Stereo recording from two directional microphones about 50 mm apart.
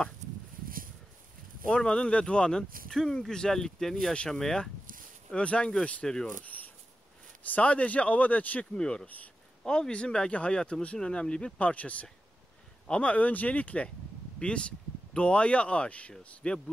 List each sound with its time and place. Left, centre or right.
1.7 s speech: centre
5.3 s speech: left
7.5 s speech: left
8.7 s speech: centre
9.0 s speech: left
9.6 s speech: centre